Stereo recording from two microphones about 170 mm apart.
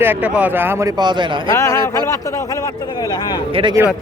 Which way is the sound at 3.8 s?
15° right (ahead or behind).